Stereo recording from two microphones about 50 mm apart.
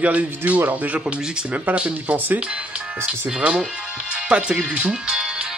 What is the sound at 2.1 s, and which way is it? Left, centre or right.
Speech, right.